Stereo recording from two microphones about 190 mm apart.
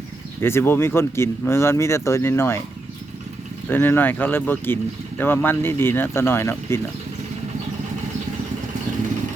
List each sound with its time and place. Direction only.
0.4 s speech: 10° left (ahead or behind)
3.7 s speech: 10° left (ahead or behind)